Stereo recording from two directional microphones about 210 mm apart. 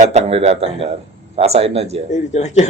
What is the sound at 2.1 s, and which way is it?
Speech, 35° left (ahead or behind).